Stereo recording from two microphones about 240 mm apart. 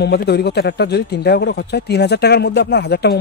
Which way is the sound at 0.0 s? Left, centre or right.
Left.